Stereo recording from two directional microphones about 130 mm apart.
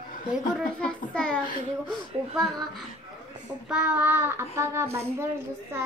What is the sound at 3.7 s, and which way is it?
A child's voice, 10° right (ahead or behind).